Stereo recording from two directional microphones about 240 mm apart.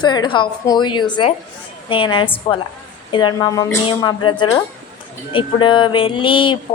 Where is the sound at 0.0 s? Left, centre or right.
Centre.